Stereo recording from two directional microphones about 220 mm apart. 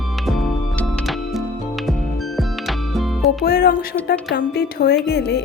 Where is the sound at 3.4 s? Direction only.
45° left (ahead or behind).